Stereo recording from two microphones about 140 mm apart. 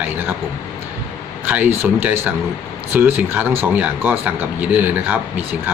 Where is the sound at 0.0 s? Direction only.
15° right (ahead or behind).